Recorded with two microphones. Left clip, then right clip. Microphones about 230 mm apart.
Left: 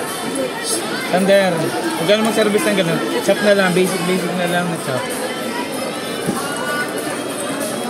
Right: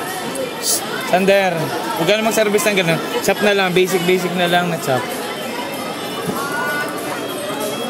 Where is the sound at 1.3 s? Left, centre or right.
Right.